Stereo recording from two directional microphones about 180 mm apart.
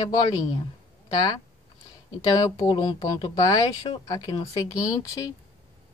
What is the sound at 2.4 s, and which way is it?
Speech, 20° left (ahead or behind).